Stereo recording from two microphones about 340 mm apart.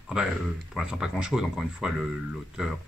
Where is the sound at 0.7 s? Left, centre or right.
Centre.